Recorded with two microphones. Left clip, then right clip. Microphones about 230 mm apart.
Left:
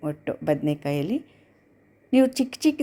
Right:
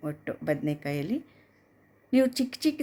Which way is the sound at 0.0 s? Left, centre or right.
Centre.